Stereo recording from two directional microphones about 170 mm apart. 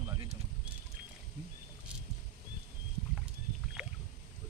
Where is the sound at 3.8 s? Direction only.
5° right (ahead or behind).